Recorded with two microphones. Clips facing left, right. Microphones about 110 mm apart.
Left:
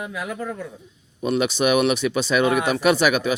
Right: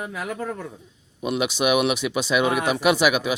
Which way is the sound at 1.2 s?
10° right (ahead or behind).